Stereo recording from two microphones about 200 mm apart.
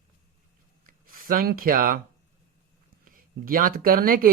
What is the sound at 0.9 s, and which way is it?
Speech, 45° right (ahead or behind).